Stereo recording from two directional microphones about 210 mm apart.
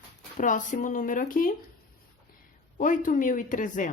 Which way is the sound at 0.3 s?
40° left (ahead or behind).